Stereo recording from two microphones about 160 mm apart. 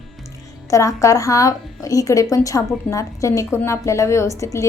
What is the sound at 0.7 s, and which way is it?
A woman's voice, 20° left (ahead or behind).